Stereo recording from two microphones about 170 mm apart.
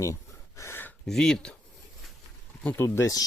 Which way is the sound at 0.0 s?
20° left (ahead or behind).